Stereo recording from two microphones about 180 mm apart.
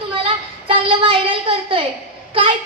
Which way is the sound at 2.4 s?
30° right (ahead or behind).